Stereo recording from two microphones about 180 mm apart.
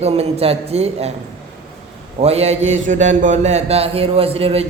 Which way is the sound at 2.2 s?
35° right (ahead or behind).